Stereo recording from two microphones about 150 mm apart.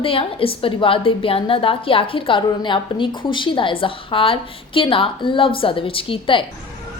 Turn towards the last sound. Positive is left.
turn(degrees=35)  # may be behind; listen again after turning